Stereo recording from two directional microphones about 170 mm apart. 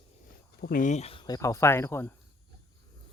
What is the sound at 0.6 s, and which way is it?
Speech, 55° left (ahead or behind).